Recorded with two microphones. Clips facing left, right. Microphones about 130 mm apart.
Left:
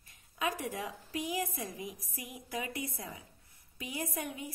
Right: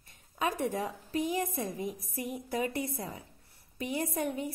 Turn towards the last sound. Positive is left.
turn(degrees=-50)  # may be behind; listen again after turning